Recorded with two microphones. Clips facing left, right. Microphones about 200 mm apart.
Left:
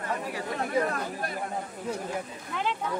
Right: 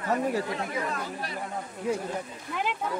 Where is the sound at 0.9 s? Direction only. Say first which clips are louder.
Left 1 dB; 50° left (ahead or behind).